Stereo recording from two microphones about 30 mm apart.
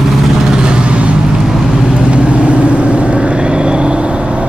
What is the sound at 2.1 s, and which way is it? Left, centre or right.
Vehicle, right.